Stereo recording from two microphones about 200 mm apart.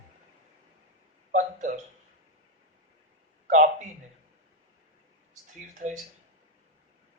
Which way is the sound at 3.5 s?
40° right (ahead or behind).